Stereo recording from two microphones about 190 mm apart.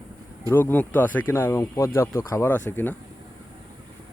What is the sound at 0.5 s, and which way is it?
Speech, 10° left (ahead or behind).